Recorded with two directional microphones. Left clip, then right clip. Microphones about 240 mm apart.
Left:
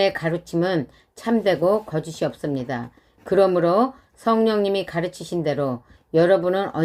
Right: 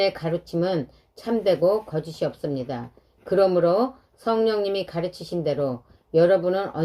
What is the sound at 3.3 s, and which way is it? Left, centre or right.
A woman's voice, left.